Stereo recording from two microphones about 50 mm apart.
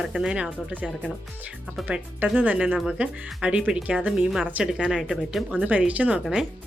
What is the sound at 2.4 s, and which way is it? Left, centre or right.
A woman's voice, right.